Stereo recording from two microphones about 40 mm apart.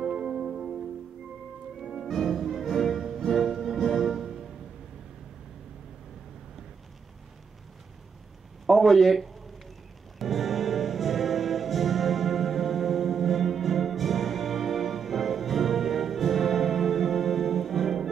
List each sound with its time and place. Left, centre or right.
0.0 s music: centre
0.6 s music: centre
2.0 s music: centre
8.6 s a sound: centre
10.1 s music: centre